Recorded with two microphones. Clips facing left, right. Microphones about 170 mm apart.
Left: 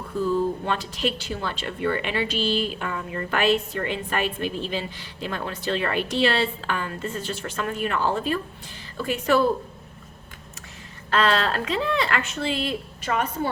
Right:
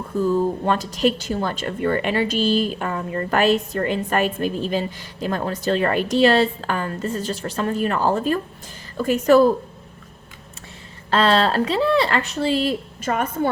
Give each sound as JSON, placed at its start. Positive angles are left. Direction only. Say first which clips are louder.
{"t": 0.2, "sound": "a woman's voice", "louder": "right 4 dB", "side_deg": -45}
{"t": 11.1, "sound": "speech", "louder": "right 4 dB", "side_deg": -30}